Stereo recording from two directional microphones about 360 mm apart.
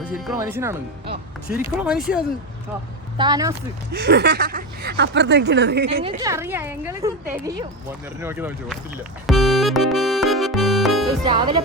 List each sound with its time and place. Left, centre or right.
0.3 s a woman's voice: centre
3.9 s speech: right
6.0 s a woman's voice: centre
9.2 s music: centre
11.3 s a woman's voice: centre